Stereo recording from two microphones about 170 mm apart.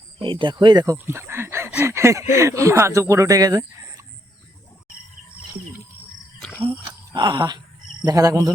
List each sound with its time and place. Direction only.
0.2 s speech: 30° right (ahead or behind)
0.9 s speech: 15° right (ahead or behind)
6.4 s a sound: 5° left (ahead or behind)
7.1 s speech: 25° right (ahead or behind)